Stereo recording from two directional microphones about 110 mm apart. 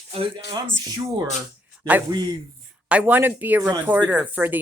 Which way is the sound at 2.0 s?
40° right (ahead or behind).